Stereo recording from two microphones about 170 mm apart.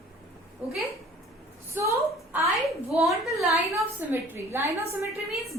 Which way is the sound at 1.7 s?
15° right (ahead or behind).